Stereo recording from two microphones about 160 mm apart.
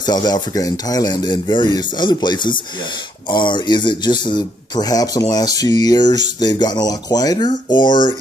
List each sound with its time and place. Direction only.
0.0 s speech: 25° left (ahead or behind)